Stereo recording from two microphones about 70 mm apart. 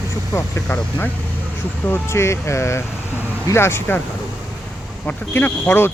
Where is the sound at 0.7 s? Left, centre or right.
Left.